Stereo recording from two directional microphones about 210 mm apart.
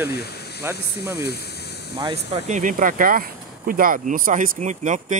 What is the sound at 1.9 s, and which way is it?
Speech, 25° right (ahead or behind).